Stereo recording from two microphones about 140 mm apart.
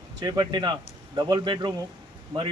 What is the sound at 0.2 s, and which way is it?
A man's voice, 30° right (ahead or behind).